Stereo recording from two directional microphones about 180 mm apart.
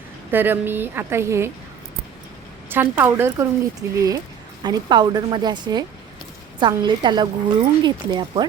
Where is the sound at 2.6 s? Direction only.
10° right (ahead or behind).